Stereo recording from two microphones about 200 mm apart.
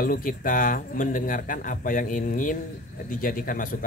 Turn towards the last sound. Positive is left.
turn(degrees=45)  # may be behind; listen again after turning